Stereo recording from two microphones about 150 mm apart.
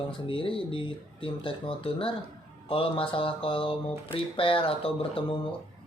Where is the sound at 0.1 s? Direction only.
35° left (ahead or behind).